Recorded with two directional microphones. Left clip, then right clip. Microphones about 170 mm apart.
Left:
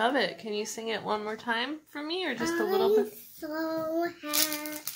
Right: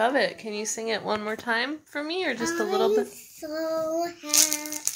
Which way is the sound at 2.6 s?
20° right (ahead or behind).